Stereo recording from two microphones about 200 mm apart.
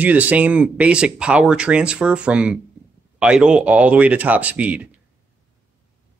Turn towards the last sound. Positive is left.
turn(degrees=-5)  # may be behind; listen again after turning